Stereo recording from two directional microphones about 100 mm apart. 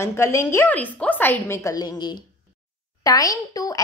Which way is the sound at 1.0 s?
20° left (ahead or behind).